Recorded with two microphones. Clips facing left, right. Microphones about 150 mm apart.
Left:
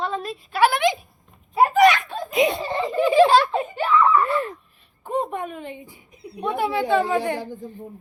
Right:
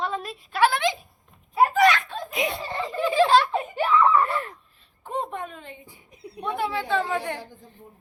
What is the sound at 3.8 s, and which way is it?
Speech, 15° right (ahead or behind).